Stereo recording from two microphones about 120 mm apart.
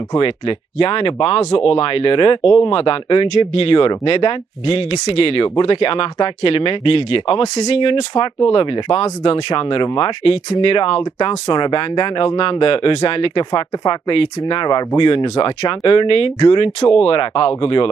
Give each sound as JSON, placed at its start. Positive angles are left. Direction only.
{"t": 0.2, "sound": "speech", "side_deg": 50}